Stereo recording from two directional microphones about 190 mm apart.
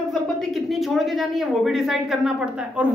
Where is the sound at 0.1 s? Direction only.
Centre (ahead or behind).